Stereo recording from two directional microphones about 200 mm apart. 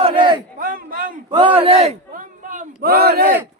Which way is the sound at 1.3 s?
25° right (ahead or behind).